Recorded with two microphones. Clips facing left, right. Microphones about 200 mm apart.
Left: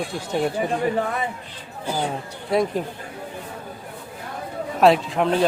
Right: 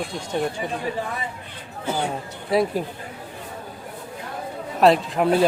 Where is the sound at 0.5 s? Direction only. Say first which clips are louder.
Left 5 dB; 55° left (ahead or behind).